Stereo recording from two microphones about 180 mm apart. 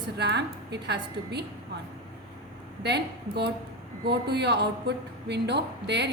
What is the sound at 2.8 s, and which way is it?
A woman's voice, 70° right (ahead or behind).